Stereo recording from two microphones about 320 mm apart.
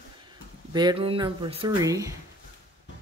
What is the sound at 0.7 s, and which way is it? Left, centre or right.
Speech, centre.